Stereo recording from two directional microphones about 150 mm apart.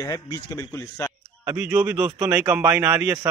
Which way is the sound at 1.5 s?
15° right (ahead or behind).